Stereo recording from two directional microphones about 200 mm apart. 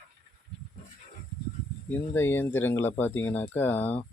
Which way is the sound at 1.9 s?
10° left (ahead or behind).